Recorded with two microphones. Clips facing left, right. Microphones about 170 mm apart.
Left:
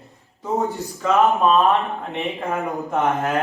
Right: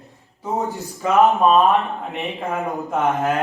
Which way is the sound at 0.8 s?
20° right (ahead or behind).